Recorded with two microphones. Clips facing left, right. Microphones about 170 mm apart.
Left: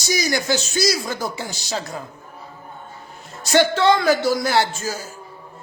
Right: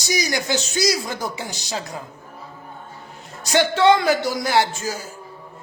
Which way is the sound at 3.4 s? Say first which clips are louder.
Even; 15° right (ahead or behind).